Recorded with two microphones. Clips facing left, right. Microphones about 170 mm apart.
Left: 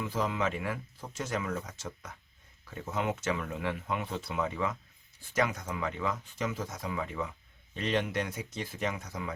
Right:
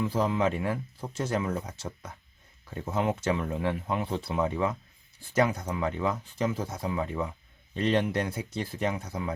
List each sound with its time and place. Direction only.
0.0 s speech: 35° right (ahead or behind)